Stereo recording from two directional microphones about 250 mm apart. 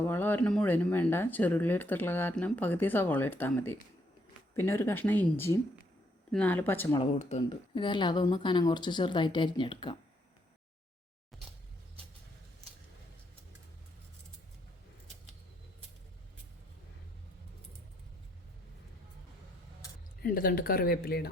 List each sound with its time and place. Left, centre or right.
0.1 s speech: centre
7.0 s speech: left
20.2 s speech: left